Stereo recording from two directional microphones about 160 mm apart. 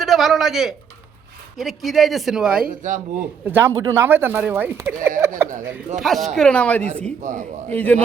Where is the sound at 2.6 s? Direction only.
50° right (ahead or behind).